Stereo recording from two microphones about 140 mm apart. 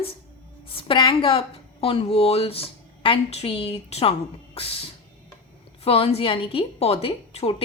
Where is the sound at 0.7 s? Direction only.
40° left (ahead or behind).